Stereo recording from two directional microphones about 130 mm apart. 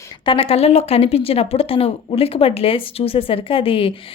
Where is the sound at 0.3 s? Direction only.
45° left (ahead or behind).